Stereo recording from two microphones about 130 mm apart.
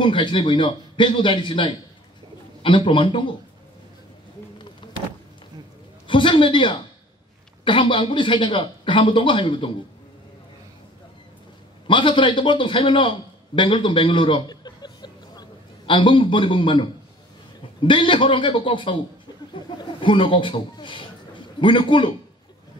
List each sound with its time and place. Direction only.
0.0 s speech: 40° left (ahead or behind)
6.0 s a sound: 40° left (ahead or behind)
7.6 s speech: 40° left (ahead or behind)
11.9 s speech: 40° left (ahead or behind)
13.6 s a sound: 40° left (ahead or behind)
15.9 s speech: 40° left (ahead or behind)